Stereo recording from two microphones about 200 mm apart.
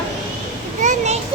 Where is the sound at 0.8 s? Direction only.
35° right (ahead or behind).